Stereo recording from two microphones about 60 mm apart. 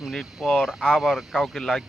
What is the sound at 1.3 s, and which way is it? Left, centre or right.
Speech, centre.